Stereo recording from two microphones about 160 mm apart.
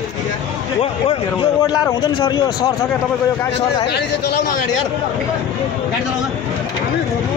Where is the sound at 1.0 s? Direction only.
30° left (ahead or behind).